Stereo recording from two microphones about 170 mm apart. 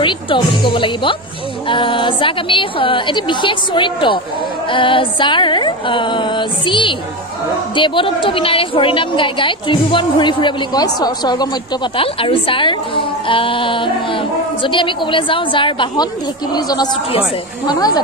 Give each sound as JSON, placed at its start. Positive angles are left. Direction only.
{"t": 0.0, "sound": "a woman's voice", "side_deg": 30}